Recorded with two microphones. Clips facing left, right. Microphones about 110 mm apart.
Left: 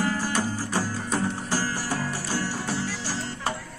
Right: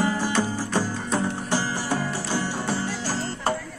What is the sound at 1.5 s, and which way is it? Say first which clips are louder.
Music: right 2 dB; 20° right (ahead or behind).